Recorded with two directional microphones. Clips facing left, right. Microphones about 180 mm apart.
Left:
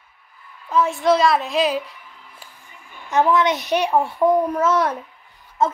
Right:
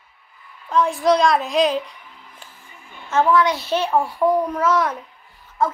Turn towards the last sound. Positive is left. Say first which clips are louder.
# left 1 dB
turn(degrees=20)  # may be behind; listen again after turning